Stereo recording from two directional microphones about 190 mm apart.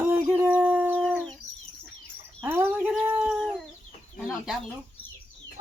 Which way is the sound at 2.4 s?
10° right (ahead or behind).